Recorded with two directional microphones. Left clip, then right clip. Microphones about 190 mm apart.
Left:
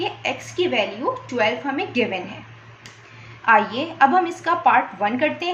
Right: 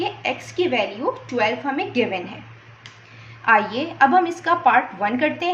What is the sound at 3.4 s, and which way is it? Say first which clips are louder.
A woman's voice: left 1 dB; 10° right (ahead or behind).